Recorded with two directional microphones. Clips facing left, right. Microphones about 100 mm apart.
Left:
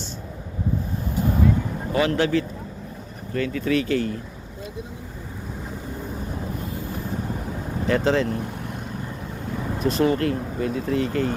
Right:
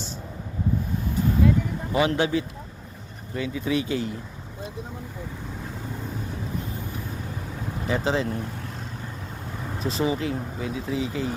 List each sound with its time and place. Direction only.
1.9 s speech: 20° right (ahead or behind)
7.9 s speech: 5° right (ahead or behind)
9.8 s speech: centre (ahead or behind)